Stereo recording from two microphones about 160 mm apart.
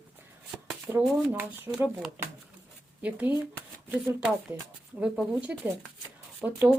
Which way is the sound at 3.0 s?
10° right (ahead or behind).